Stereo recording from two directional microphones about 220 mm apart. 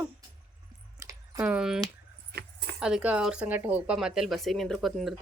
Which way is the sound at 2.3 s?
50° right (ahead or behind).